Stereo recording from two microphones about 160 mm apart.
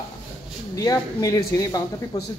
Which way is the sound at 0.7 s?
20° left (ahead or behind).